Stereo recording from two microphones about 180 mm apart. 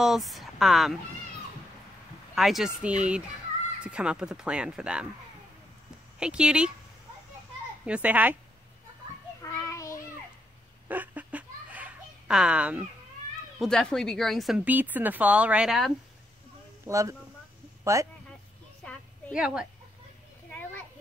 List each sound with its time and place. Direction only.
0.0 s speech: centre (ahead or behind)
2.3 s speech: centre (ahead or behind)
6.1 s speech: 5° right (ahead or behind)
7.8 s a child's voice: 5° right (ahead or behind)
9.4 s children playing: 15° left (ahead or behind)
10.9 s a sound: 10° right (ahead or behind)
13.6 s speech: 5° left (ahead or behind)
16.8 s a child's voice: 15° right (ahead or behind)
18.8 s a sound: 5° left (ahead or behind)
19.3 s speech: 5° right (ahead or behind)